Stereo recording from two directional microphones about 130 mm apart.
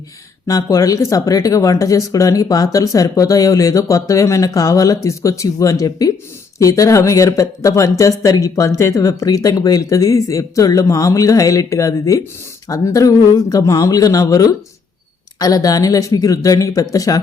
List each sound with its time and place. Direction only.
0.4 s speech: 25° left (ahead or behind)